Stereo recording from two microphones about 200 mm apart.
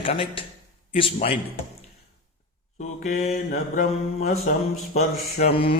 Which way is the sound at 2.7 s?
35° left (ahead or behind).